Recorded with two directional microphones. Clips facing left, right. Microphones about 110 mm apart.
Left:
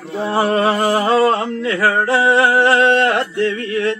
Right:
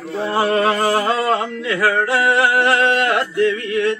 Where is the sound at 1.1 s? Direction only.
30° left (ahead or behind).